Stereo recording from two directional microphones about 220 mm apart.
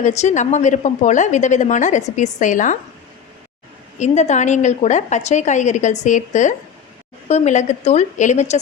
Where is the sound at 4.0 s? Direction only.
30° left (ahead or behind).